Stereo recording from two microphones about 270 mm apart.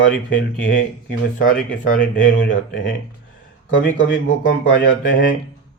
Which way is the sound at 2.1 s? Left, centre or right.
Left.